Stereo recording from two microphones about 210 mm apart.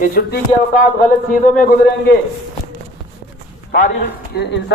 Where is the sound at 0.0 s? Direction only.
45° left (ahead or behind).